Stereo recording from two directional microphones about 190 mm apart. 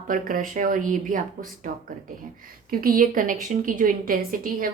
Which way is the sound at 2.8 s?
50° right (ahead or behind).